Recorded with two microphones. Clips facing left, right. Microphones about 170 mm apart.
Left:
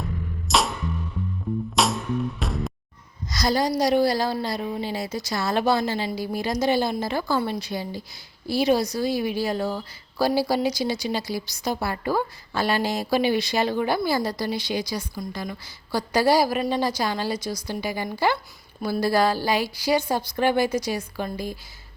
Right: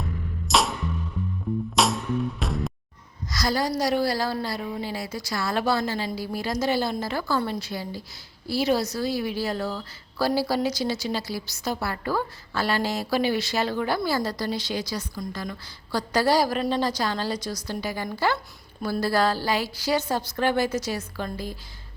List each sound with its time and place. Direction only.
0.0 s music: centre (ahead or behind)
1.7 s music: centre (ahead or behind)
3.2 s a woman's voice: 20° left (ahead or behind)